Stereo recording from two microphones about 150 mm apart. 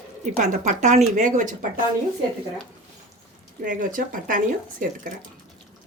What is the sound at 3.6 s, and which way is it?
Speech, 60° right (ahead or behind).